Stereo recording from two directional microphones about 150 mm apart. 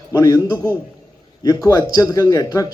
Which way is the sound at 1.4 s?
20° left (ahead or behind).